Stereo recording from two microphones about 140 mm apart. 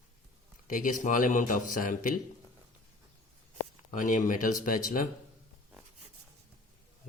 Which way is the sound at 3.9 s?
65° left (ahead or behind).